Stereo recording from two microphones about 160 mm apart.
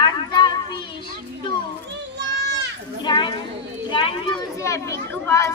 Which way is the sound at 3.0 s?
30° left (ahead or behind).